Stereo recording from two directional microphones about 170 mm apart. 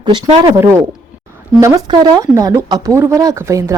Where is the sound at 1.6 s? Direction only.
20° right (ahead or behind).